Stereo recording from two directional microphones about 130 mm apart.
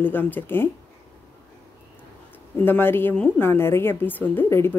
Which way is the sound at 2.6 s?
15° left (ahead or behind).